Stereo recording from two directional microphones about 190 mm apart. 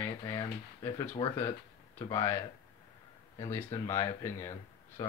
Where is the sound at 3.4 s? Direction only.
15° left (ahead or behind).